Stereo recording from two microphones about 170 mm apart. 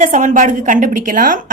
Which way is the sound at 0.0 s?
45° right (ahead or behind).